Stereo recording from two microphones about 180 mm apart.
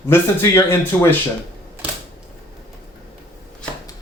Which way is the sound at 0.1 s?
10° left (ahead or behind).